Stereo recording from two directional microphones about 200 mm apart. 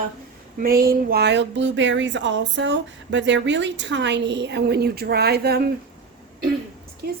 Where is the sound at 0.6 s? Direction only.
50° right (ahead or behind).